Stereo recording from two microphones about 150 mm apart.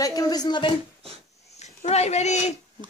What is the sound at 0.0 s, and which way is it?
Speech, 25° left (ahead or behind).